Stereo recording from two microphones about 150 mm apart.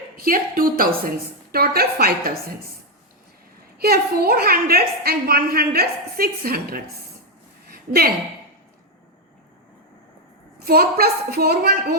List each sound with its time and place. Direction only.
0.2 s a woman's voice: 75° right (ahead or behind)
1.5 s a woman's voice: 90° right
3.8 s a woman's voice: 90° right
7.7 s a sound: 90° right
10.6 s a woman's voice: 90° right